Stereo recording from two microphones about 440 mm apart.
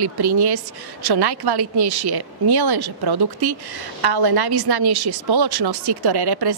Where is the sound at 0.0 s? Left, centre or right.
Right.